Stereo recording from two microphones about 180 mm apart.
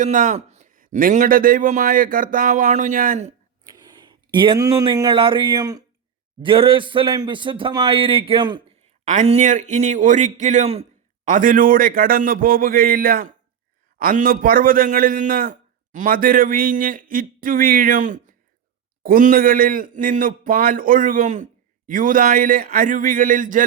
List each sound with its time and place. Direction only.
0.0 s a sound: 45° right (ahead or behind)
0.9 s a man's voice: 50° right (ahead or behind)
3.7 s a man's voice: 25° right (ahead or behind)
9.0 s a man's voice: 40° right (ahead or behind)
11.3 s a man's voice: 45° right (ahead or behind)